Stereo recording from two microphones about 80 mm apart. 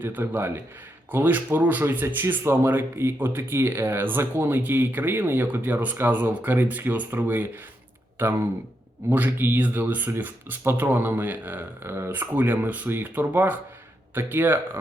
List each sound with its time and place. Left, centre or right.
0.0 s speech: right